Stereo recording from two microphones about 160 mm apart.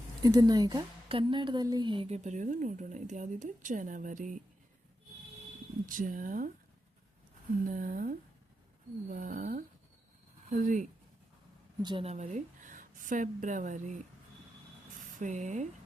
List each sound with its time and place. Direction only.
0.2 s a woman's voice: 25° right (ahead or behind)
2.0 s speech: 45° right (ahead or behind)
5.8 s speech: 55° right (ahead or behind)
7.7 s speech: 55° right (ahead or behind)
11.8 s a woman's voice: 25° right (ahead or behind)
12.0 s a woman's voice: 45° right (ahead or behind)